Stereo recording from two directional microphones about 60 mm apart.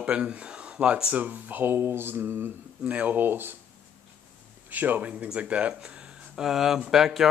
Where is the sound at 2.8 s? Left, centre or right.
Right.